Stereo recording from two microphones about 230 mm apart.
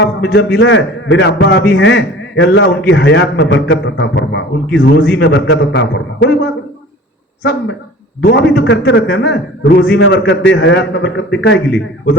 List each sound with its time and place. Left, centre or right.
0.0 s a man's voice: left
8.2 s a man's voice: left